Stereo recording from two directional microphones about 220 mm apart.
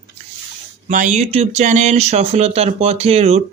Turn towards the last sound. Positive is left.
turn(degrees=-30)  # may be behind; listen again after turning